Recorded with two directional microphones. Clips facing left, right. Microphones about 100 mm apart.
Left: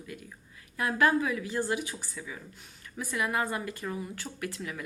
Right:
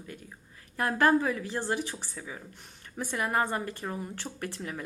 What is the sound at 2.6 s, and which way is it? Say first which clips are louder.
A woman's voice: right 2 dB; 45° right (ahead or behind).